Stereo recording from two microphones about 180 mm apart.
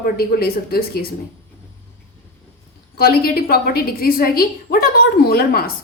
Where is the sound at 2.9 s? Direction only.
55° left (ahead or behind).